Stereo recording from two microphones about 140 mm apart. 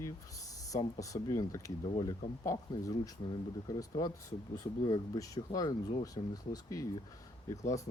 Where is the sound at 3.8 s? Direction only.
25° left (ahead or behind).